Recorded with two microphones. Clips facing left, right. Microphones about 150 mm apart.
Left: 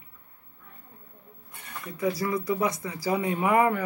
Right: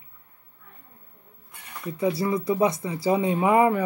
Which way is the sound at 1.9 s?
25° right (ahead or behind).